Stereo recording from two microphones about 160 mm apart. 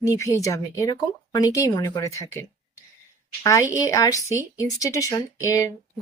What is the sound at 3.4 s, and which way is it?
Speech, 20° left (ahead or behind).